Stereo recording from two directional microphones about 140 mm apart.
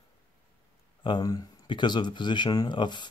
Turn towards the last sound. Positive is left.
turn(degrees=30)  # may be behind; listen again after turning